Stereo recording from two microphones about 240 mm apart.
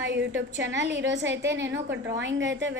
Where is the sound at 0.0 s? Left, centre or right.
Right.